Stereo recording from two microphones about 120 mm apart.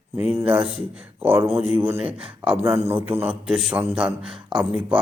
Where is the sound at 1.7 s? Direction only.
15° right (ahead or behind).